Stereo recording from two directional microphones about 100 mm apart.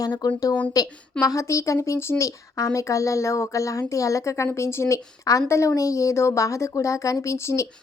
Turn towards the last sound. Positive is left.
turn(degrees=30)  # may be behind; listen again after turning